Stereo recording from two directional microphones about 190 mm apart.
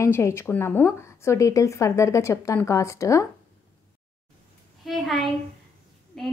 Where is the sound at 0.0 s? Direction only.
15° left (ahead or behind).